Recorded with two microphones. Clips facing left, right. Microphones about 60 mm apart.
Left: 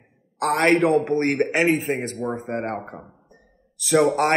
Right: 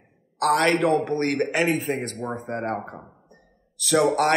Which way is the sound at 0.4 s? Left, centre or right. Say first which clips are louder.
Left 2 dB; left.